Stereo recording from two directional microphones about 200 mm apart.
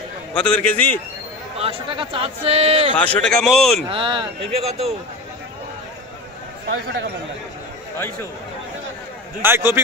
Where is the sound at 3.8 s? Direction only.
25° right (ahead or behind).